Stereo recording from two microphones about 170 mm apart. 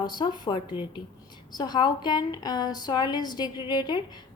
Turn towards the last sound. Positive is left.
turn(degrees=25)  # may be behind; listen again after turning